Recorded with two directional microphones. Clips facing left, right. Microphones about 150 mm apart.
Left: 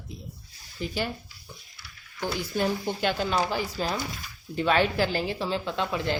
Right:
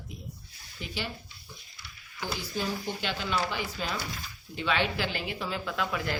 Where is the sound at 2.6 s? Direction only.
45° left (ahead or behind).